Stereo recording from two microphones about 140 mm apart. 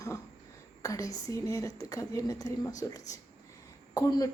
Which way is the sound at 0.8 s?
25° left (ahead or behind).